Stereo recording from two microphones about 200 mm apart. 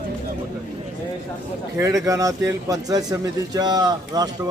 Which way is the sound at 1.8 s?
15° right (ahead or behind).